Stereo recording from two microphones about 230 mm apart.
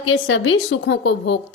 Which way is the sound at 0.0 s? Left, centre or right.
Left.